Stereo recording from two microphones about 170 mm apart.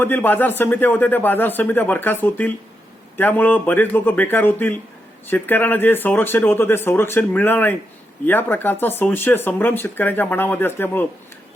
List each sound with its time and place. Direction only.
0.0 s speech: 10° left (ahead or behind)